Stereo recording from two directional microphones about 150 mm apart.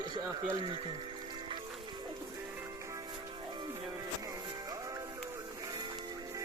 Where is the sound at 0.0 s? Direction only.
30° right (ahead or behind).